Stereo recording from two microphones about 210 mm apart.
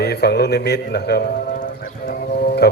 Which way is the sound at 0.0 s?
50° left (ahead or behind).